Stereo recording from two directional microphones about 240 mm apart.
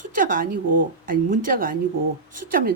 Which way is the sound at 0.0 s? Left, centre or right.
Right.